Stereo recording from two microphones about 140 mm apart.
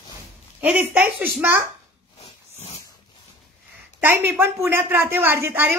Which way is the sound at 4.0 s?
15° right (ahead or behind).